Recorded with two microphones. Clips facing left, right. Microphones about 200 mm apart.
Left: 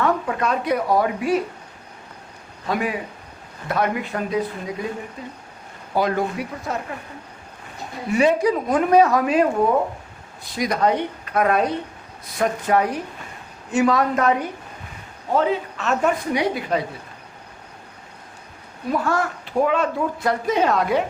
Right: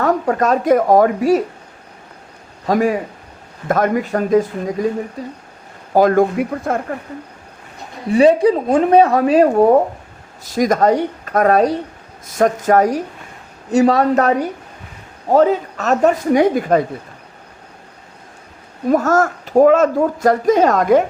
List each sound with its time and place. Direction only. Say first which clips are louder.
0.0 s speech: right 5 dB; 40° right (ahead or behind)
2.6 s speech: right 8 dB; 40° right (ahead or behind)
8.1 s speech: right 7 dB; 30° right (ahead or behind); by 16.8 s 50° right (ahead or behind)
18.9 s speech: right 8 dB; 45° right (ahead or behind)